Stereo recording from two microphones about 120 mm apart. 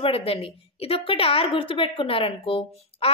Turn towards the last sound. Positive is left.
turn(degrees=50)  # may be behind; listen again after turning